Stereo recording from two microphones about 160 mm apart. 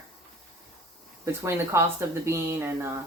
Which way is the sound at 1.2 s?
15° right (ahead or behind).